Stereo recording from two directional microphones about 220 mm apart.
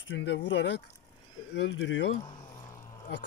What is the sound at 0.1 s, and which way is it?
Speech, 50° left (ahead or behind).